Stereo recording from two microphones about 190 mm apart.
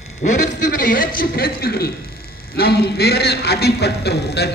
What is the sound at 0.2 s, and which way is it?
A man's voice, 45° left (ahead or behind).